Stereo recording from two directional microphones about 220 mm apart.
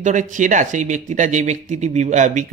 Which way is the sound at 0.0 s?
35° right (ahead or behind).